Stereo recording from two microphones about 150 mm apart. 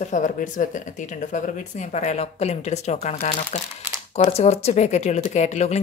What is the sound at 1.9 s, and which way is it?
Speech, 50° left (ahead or behind).